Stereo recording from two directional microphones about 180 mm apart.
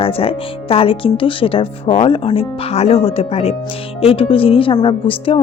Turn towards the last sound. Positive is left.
turn(degrees=30)  # may be behind; listen again after turning